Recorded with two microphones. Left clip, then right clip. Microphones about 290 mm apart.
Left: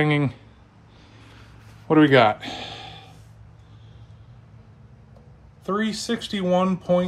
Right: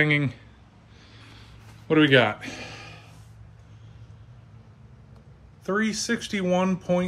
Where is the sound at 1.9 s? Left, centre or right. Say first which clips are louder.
Left 3 dB; centre.